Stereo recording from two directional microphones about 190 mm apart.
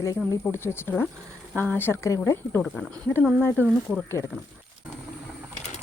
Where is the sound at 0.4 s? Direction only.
10° left (ahead or behind).